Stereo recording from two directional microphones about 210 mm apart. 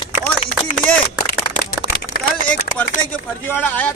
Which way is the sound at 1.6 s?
45° left (ahead or behind).